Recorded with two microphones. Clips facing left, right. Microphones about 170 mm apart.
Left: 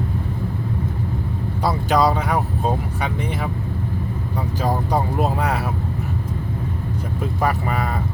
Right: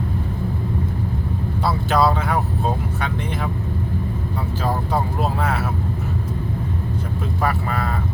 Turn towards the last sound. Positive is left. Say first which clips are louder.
# left 1 dB
turn(degrees=15)  # may be behind; listen again after turning